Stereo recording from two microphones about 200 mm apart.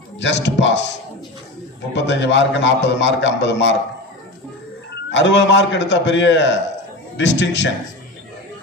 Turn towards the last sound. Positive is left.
turn(degrees=65)  # may be behind; listen again after turning